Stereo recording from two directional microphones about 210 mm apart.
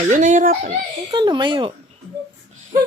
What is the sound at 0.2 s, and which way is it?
Speech, 35° right (ahead or behind).